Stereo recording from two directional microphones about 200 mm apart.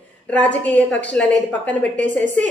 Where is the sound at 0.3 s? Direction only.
5° left (ahead or behind).